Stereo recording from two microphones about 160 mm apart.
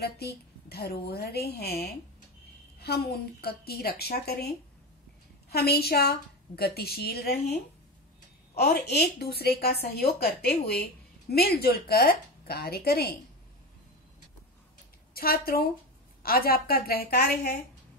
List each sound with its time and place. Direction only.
0.0 s a woman's voice: 80° left
8.5 s a woman's voice: 85° left
15.1 s a woman's voice: 70° left (ahead or behind)